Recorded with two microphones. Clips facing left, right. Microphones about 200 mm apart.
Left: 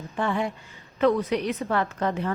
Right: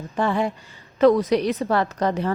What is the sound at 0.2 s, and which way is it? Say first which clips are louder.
A woman's voice: right 4 dB; 35° right (ahead or behind).